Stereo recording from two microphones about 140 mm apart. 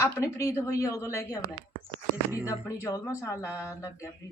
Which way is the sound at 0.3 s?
20° left (ahead or behind).